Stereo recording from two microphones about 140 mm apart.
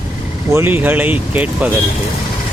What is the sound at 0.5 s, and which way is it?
Speech, 15° right (ahead or behind).